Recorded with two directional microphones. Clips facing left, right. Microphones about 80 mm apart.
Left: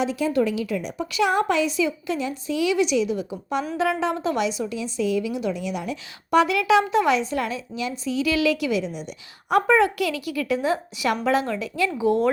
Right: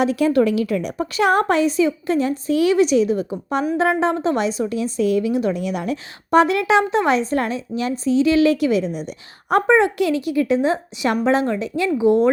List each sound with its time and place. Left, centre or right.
0.0 s a woman's voice: right